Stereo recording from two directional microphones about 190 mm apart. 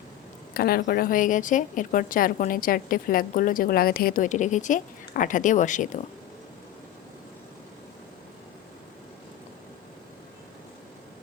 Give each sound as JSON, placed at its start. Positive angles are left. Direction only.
{"t": 0.5, "sound": "a woman's voice", "side_deg": 50}